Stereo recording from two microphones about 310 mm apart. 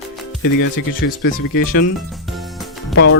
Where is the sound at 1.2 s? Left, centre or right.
Left.